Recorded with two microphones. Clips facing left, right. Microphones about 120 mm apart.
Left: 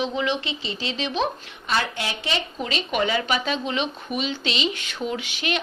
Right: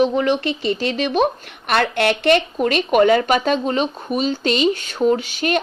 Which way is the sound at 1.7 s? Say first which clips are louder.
Right 8 dB; 65° right (ahead or behind).